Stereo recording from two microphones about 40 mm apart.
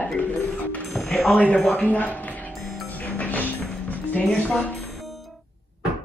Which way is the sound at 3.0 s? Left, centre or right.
Left.